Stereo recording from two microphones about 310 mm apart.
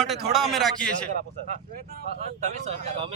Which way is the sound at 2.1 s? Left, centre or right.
Right.